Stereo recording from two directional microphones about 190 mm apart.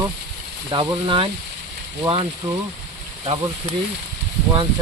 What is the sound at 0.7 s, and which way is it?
Speech, 25° right (ahead or behind).